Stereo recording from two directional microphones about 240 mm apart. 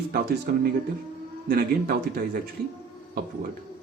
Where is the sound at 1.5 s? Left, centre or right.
Right.